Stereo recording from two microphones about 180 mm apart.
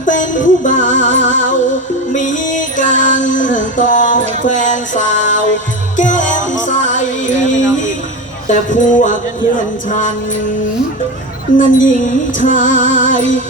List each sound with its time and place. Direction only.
0.0 s music: 45° left (ahead or behind)
6.0 s music: 45° left (ahead or behind)
11.5 s music: 45° left (ahead or behind)